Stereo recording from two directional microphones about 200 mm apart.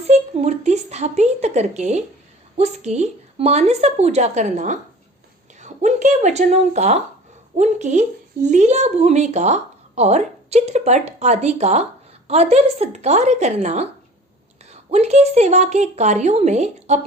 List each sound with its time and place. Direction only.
0.1 s speech: 35° right (ahead or behind)